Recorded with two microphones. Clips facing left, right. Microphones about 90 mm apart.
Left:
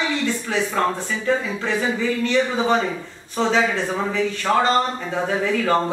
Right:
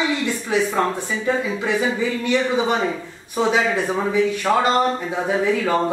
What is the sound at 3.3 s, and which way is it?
Speech, 10° right (ahead or behind).